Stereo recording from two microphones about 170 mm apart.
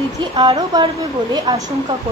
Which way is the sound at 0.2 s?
25° right (ahead or behind).